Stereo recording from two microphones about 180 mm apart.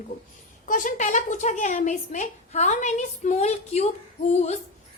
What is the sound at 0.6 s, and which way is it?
A woman's voice, 45° left (ahead or behind).